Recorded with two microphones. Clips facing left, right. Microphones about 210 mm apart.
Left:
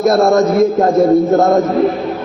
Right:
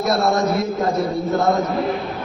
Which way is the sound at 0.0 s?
50° left (ahead or behind).